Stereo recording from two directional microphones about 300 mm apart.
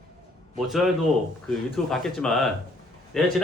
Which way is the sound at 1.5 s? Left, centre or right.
Centre.